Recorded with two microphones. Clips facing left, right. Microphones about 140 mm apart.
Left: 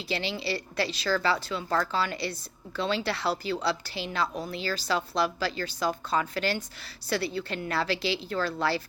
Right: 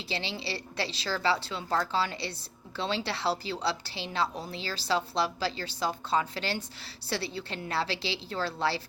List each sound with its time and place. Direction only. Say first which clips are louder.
0.1 s a woman's voice: left 5 dB; 25° right (ahead or behind)